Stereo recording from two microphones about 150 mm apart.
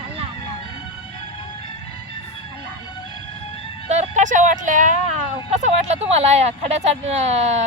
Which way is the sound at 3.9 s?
50° right (ahead or behind).